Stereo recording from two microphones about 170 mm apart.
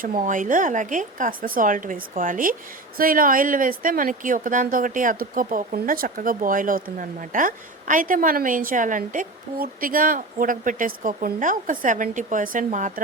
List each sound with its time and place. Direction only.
0.3 s a woman's voice: 50° right (ahead or behind)